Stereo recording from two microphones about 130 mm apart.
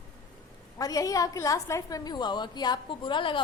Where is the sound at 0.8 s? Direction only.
25° left (ahead or behind).